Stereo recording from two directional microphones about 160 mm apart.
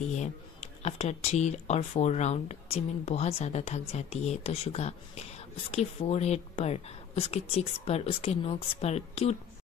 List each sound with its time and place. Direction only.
0.1 s speech: 45° left (ahead or behind)